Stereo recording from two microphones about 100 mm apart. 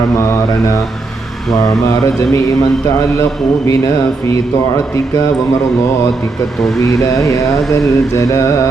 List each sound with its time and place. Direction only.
7.3 s mantra: 30° left (ahead or behind)